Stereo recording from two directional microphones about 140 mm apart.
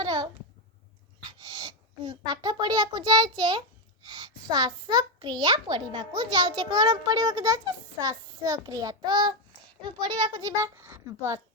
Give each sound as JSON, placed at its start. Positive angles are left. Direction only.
{"t": 0.0, "sound": "a sound", "side_deg": -30}
{"t": 1.3, "sound": "a child's voice", "side_deg": -30}
{"t": 10.8, "sound": "speech", "side_deg": -20}